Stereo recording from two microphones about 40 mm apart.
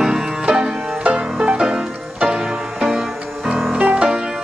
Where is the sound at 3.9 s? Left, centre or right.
Right.